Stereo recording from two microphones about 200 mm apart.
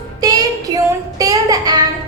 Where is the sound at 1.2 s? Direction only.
20° right (ahead or behind).